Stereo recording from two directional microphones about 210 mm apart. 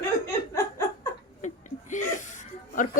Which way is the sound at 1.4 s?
35° left (ahead or behind).